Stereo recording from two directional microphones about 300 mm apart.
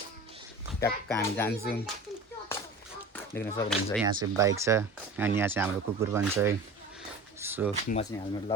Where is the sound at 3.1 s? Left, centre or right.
Centre.